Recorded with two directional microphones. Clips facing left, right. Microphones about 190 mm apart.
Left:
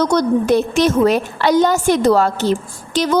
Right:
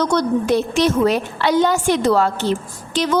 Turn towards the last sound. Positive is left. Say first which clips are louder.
# left 2 dB
turn(degrees=40)  # may be behind; listen again after turning